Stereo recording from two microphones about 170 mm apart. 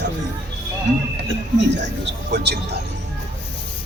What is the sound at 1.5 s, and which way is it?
Speech, 90° right.